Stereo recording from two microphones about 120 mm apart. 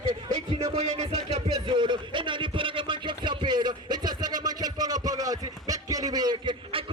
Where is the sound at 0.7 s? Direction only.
50° right (ahead or behind).